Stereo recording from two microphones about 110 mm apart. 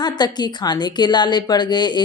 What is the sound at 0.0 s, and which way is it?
A woman's voice, 40° left (ahead or behind).